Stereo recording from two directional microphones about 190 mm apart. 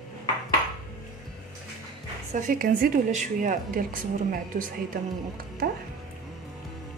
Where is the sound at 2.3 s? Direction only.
45° right (ahead or behind).